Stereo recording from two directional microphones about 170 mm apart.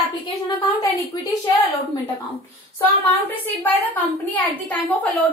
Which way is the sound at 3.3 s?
10° left (ahead or behind).